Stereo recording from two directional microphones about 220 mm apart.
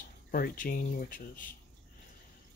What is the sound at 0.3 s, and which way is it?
Speech, 40° left (ahead or behind).